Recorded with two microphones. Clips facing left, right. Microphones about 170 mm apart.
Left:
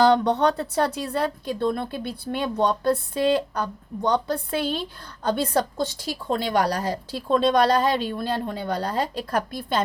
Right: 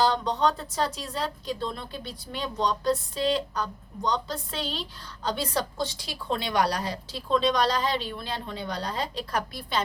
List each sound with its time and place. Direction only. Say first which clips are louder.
0.0 s a woman's voice: left 6 dB; 65° left (ahead or behind)